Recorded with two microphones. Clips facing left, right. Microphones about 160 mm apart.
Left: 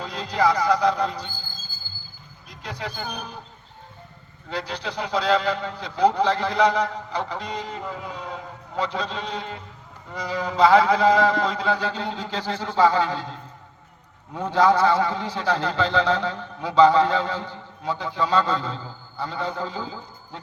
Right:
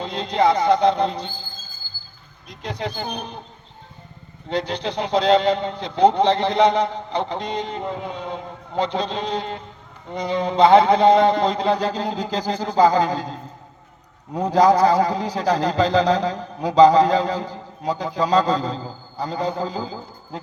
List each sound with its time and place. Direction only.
0.0 s speech: 30° right (ahead or behind)
2.6 s speech: 30° right (ahead or behind)
4.4 s a man's voice: 30° right (ahead or behind)